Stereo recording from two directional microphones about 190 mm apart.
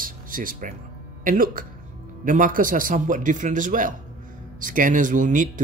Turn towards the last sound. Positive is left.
turn(degrees=-45)  # may be behind; listen again after turning